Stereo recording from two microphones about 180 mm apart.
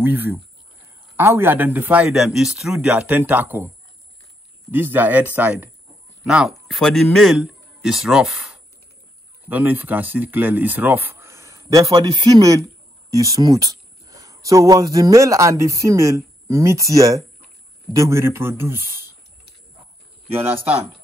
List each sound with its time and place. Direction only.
0.0 s a man's voice: 10° right (ahead or behind)